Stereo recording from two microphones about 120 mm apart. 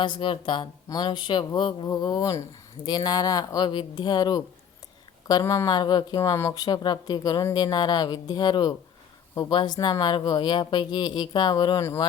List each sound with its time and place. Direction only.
0.0 s speech: 45° left (ahead or behind)
1.9 s speech: 30° left (ahead or behind)
11.8 s speech: 25° left (ahead or behind)